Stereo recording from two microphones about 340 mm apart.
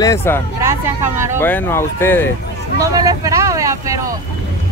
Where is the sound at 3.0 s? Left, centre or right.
Centre.